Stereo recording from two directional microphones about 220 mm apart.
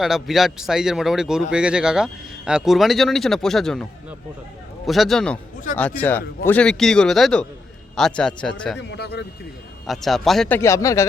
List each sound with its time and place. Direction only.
0.0 s speech: centre (ahead or behind)
4.9 s speech: centre (ahead or behind)
8.8 s speech: 50° left (ahead or behind)
9.8 s speech: centre (ahead or behind)